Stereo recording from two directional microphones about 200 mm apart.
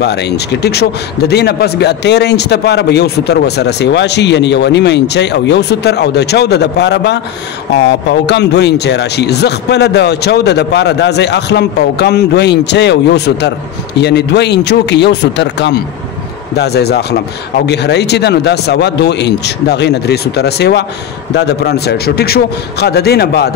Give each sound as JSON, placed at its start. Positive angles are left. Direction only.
{"t": 0.0, "sound": "a man's voice", "side_deg": 55}